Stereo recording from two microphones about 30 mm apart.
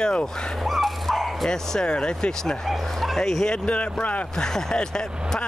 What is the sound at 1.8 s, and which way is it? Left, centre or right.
Speech, left.